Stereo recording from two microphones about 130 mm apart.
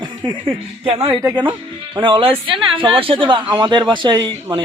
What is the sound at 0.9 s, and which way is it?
Speech, 45° right (ahead or behind).